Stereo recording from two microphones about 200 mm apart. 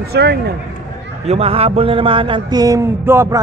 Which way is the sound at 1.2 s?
30° right (ahead or behind).